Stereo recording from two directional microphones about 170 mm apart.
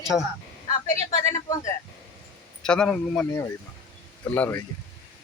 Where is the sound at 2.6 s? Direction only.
5° left (ahead or behind).